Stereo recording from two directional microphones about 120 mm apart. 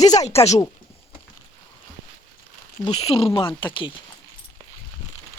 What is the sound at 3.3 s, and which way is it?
Speech, 40° left (ahead or behind).